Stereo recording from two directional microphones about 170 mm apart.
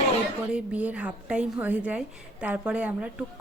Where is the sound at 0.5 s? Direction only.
10° right (ahead or behind).